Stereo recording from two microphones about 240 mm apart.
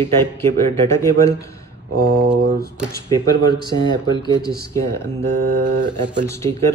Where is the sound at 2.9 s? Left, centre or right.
Centre.